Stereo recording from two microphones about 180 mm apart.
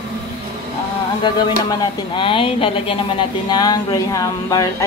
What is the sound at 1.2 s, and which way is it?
Speech, 25° left (ahead or behind).